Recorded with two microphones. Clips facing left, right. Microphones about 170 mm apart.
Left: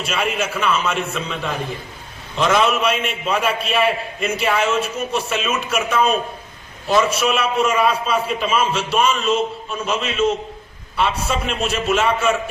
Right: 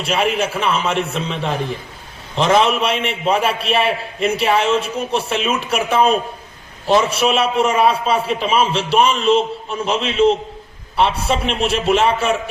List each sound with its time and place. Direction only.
0.0 s a man's voice: 30° right (ahead or behind)